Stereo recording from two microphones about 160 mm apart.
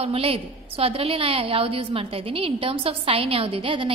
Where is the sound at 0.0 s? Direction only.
35° right (ahead or behind).